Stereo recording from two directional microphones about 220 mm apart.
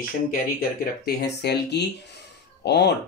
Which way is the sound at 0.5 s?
45° left (ahead or behind).